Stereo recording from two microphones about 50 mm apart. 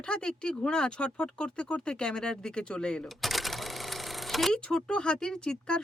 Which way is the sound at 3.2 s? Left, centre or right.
Centre.